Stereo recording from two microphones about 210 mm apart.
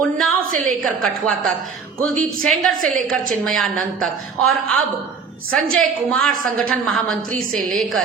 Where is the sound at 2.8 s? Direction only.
40° right (ahead or behind).